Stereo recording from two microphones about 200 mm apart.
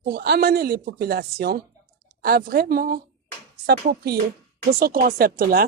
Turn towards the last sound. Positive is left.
turn(degrees=-50)  # may be behind; listen again after turning